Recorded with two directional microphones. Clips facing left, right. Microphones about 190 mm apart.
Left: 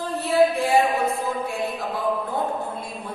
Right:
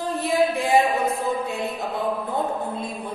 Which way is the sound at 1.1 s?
20° right (ahead or behind).